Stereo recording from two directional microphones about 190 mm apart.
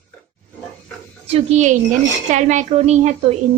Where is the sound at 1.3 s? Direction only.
35° right (ahead or behind).